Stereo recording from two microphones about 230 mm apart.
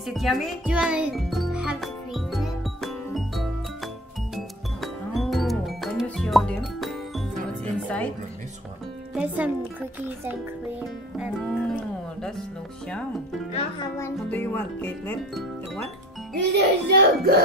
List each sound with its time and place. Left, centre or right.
0.0 s music: centre
9.1 s speech: centre
12.8 s speech: centre
13.5 s a child's voice: left
13.9 s speech: centre
16.3 s a child's voice: right